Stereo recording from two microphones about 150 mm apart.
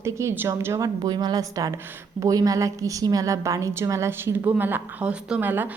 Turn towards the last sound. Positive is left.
turn(degrees=-10)  # may be behind; listen again after turning